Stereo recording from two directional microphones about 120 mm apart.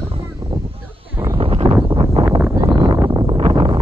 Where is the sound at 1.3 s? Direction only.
50° right (ahead or behind).